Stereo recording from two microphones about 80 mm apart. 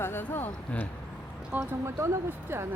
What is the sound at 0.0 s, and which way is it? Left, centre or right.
Speech, left.